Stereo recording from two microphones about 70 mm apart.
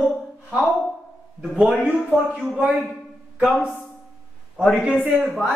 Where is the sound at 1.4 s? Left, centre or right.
Centre.